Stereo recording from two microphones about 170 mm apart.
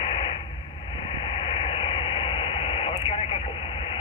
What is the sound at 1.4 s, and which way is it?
Radio, 30° left (ahead or behind).